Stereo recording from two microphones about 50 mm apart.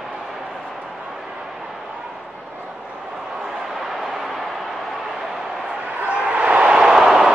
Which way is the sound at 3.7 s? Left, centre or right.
Centre.